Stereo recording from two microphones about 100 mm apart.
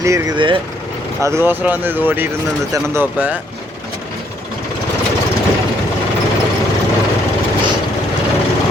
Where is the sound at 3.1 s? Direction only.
15° right (ahead or behind).